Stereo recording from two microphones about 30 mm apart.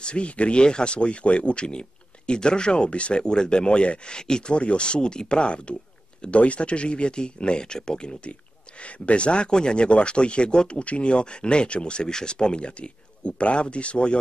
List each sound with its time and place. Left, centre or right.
0.0 s speech: left
9.0 s speech: left